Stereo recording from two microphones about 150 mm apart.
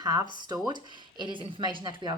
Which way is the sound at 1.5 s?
30° right (ahead or behind).